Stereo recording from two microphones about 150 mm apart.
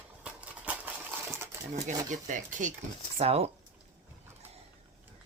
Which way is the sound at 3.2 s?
40° right (ahead or behind).